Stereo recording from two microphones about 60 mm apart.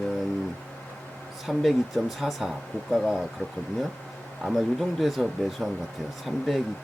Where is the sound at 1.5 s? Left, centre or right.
Centre.